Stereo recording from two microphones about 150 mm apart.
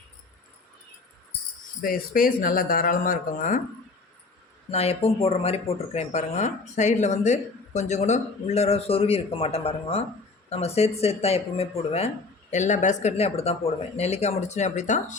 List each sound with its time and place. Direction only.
1.8 s speech: 70° left (ahead or behind)
4.7 s speech: 45° left (ahead or behind)